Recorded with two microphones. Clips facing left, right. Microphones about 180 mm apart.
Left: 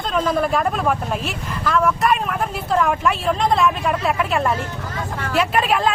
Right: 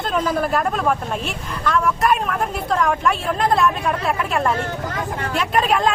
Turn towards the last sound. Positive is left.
turn(degrees=0)  # may be behind; listen again after turning